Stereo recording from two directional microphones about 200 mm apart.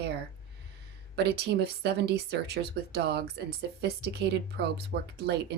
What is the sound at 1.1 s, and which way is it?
Speech, 55° right (ahead or behind).